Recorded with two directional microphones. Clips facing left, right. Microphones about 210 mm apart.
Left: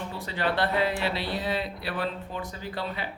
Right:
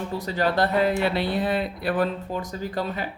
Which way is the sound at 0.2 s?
40° right (ahead or behind).